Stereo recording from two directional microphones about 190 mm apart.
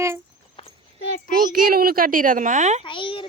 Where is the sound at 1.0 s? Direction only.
55° left (ahead or behind).